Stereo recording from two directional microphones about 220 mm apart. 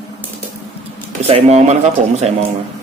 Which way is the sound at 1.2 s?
30° right (ahead or behind).